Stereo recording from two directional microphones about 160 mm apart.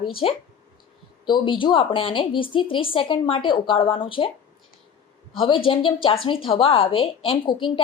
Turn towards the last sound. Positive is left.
turn(degrees=30)  # may be behind; listen again after turning